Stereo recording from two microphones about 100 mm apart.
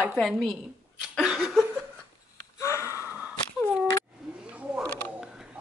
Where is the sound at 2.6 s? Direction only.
30° left (ahead or behind).